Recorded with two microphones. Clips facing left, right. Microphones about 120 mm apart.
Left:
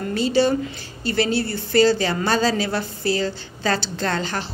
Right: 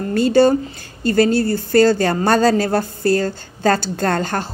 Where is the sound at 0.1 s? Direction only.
50° right (ahead or behind).